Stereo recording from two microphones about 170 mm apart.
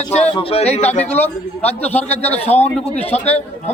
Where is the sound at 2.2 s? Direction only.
40° left (ahead or behind).